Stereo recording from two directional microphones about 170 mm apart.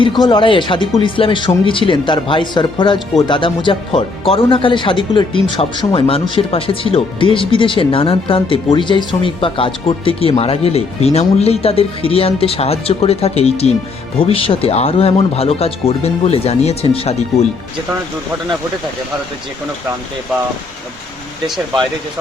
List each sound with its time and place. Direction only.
0.0 s speech: 25° left (ahead or behind)
21.4 s speech: centre (ahead or behind)